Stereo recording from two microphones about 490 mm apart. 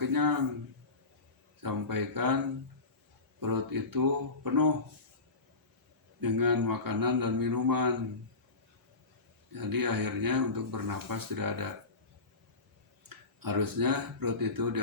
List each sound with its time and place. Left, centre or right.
0.0 s a man's voice: right
1.6 s speech: right
3.4 s speech: right
6.1 s speech: right
9.5 s speech: right
13.1 s speech: right